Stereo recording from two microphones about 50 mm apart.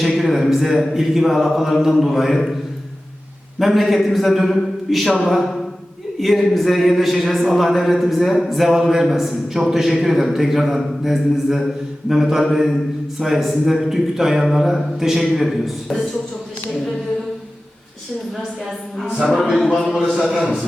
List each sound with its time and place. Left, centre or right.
0.2 s a man's voice: centre
3.6 s a man's voice: centre
19.5 s a man's voice: centre
20.0 s a man's voice: right